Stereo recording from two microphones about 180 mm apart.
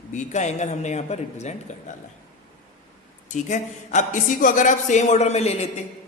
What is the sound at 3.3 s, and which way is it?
A man's voice, 40° left (ahead or behind).